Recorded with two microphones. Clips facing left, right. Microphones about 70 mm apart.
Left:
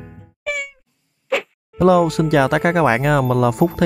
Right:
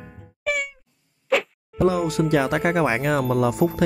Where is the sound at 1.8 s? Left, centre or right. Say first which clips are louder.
Left 6 dB; left.